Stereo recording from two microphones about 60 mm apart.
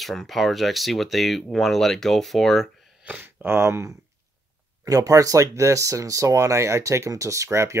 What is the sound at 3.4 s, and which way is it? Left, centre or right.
Speech, right.